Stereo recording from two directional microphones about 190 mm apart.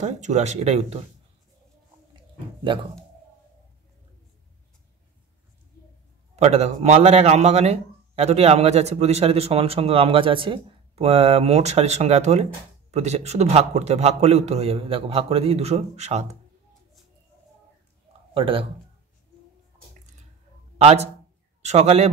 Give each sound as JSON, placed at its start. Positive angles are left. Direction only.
{"t": 0.0, "sound": "a man's voice", "side_deg": -35}
{"t": 2.1, "sound": "a sound", "side_deg": -25}
{"t": 6.3, "sound": "a man's voice", "side_deg": -35}
{"t": 18.3, "sound": "a man's voice", "side_deg": -30}
{"t": 20.7, "sound": "a man's voice", "side_deg": -35}